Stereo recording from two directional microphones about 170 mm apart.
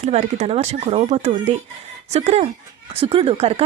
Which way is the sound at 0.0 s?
40° right (ahead or behind).